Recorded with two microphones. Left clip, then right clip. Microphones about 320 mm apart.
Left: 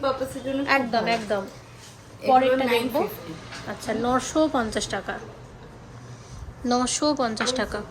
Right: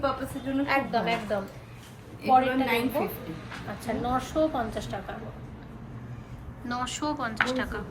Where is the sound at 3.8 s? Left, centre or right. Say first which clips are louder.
Left 5 dB; left.